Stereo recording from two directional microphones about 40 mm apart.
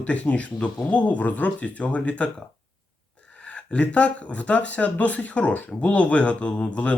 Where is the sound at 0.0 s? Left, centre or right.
Left.